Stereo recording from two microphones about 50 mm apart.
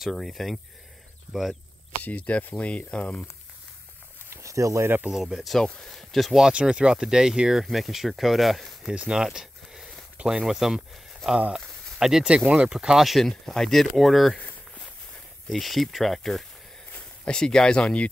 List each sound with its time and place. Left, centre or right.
0.1 s speech: centre
2.0 s speech: left
4.4 s speech: right
5.1 s speech: centre
6.4 s speech: centre
8.9 s speech: centre
11.2 s speech: centre
12.0 s speech: centre
13.3 s speech: centre
15.5 s speech: centre
17.3 s speech: centre